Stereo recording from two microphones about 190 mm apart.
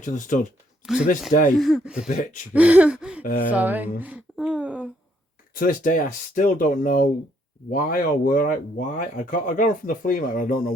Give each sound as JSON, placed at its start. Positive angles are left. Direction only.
{"t": 0.0, "sound": "speech", "side_deg": 40}
{"t": 0.8, "sound": "speech", "side_deg": -5}
{"t": 1.3, "sound": "speech", "side_deg": 40}
{"t": 1.5, "sound": "speech", "side_deg": 0}
{"t": 2.0, "sound": "speech", "side_deg": 45}
{"t": 2.5, "sound": "a sound", "side_deg": -5}
{"t": 3.2, "sound": "speech", "side_deg": 45}
{"t": 3.5, "sound": "speech", "side_deg": -10}
{"t": 5.5, "sound": "speech", "side_deg": 45}